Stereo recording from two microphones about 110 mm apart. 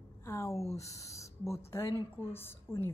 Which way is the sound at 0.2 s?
25° left (ahead or behind).